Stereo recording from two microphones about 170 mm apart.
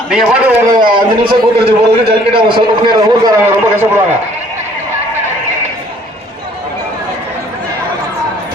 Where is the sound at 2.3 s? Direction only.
30° right (ahead or behind).